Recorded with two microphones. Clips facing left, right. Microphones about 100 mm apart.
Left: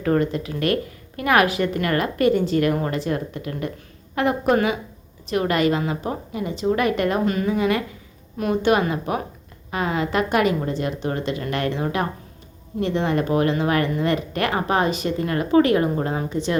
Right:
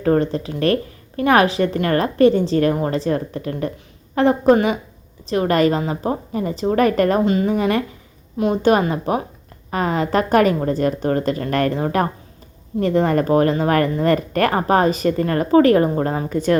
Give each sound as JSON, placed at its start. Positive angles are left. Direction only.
{"t": 0.0, "sound": "speech", "side_deg": -35}
{"t": 7.3, "sound": "a woman's voice", "side_deg": -30}